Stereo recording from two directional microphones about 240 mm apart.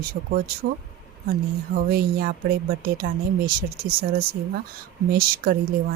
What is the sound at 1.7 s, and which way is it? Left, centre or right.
A woman's voice, right.